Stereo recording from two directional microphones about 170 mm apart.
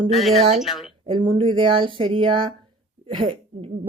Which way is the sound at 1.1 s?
30° right (ahead or behind).